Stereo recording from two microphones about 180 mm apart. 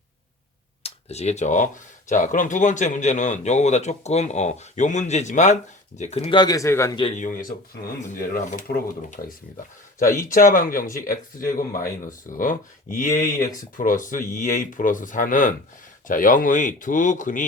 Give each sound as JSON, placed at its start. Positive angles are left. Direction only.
{"t": 0.8, "sound": "speech", "side_deg": 35}
{"t": 6.4, "sound": "speech", "side_deg": 20}
{"t": 7.2, "sound": "speech", "side_deg": 50}
{"t": 10.3, "sound": "speech", "side_deg": 50}
{"t": 13.2, "sound": "speech", "side_deg": 20}
{"t": 13.7, "sound": "speech", "side_deg": 45}